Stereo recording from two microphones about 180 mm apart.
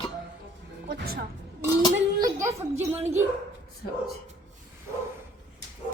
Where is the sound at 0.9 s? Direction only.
60° right (ahead or behind).